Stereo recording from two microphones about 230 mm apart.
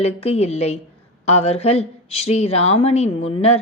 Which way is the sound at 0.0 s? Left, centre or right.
Left.